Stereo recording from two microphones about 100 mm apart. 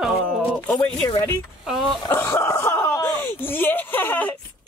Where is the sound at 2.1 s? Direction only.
25° left (ahead or behind).